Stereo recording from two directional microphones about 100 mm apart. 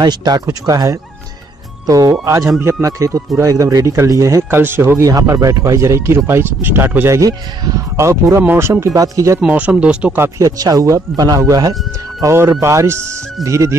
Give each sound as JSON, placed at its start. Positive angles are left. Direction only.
{"t": 0.0, "sound": "speech", "side_deg": -45}
{"t": 7.2, "sound": "speech", "side_deg": -35}
{"t": 9.4, "sound": "speech", "side_deg": -15}
{"t": 10.4, "sound": "speech", "side_deg": -35}